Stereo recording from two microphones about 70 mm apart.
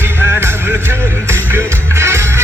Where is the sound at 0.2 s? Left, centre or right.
Right.